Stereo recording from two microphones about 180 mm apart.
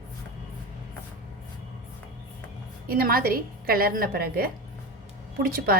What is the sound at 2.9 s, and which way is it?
A woman's voice, 55° right (ahead or behind).